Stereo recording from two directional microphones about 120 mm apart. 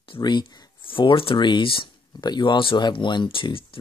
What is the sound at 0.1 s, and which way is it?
Speech, 40° left (ahead or behind).